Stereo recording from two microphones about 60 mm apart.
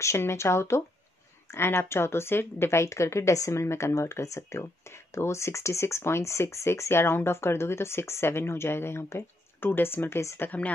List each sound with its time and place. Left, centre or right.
0.0 s a woman's voice: left